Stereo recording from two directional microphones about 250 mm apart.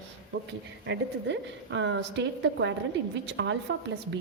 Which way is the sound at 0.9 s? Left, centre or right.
Right.